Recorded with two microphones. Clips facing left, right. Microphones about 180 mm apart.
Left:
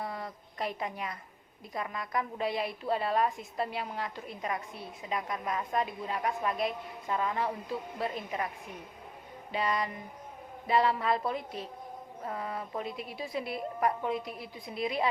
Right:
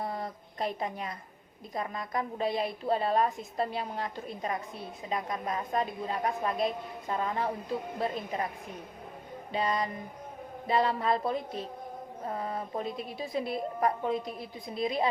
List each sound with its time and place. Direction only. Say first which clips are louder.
0.2 s a sound: right 2 dB; 30° right (ahead or behind)
1.7 s a woman's voice: right 1 dB; 35° right (ahead or behind)
9.5 s a woman's voice: right 1 dB; 30° right (ahead or behind)